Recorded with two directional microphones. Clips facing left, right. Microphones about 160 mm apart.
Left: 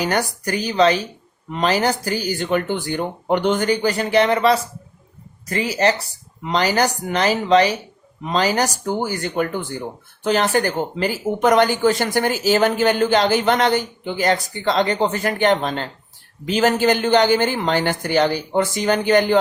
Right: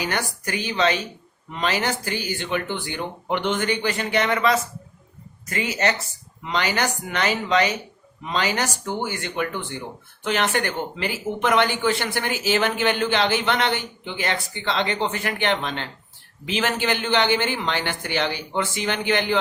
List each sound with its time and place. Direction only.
0.0 s speech: 40° left (ahead or behind)